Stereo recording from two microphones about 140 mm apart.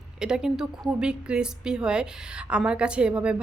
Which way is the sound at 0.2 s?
5° right (ahead or behind).